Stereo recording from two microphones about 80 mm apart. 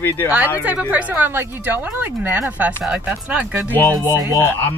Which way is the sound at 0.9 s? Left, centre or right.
Centre.